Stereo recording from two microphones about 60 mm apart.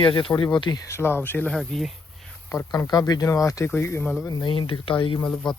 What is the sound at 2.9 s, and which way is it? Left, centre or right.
Speech, left.